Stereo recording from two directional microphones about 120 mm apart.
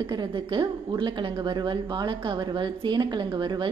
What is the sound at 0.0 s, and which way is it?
A woman's voice, 40° right (ahead or behind).